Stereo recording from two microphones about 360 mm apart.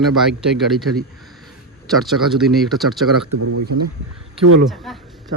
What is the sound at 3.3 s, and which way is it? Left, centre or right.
Speech, right.